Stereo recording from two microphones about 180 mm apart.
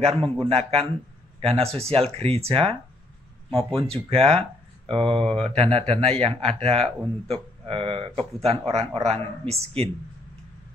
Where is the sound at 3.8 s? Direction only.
35° right (ahead or behind).